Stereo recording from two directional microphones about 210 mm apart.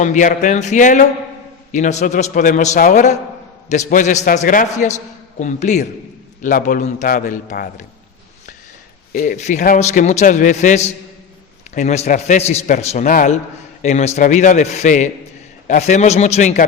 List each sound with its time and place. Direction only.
0.0 s a man's voice: 35° left (ahead or behind)
9.1 s a man's voice: 40° left (ahead or behind)